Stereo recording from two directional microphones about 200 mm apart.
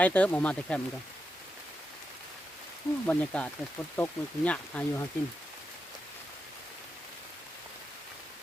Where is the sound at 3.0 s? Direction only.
5° left (ahead or behind).